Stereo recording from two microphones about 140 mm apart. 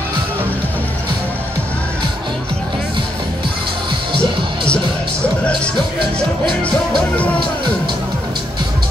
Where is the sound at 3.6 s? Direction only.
35° right (ahead or behind).